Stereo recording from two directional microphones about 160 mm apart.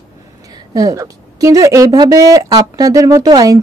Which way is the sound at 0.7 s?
20° right (ahead or behind).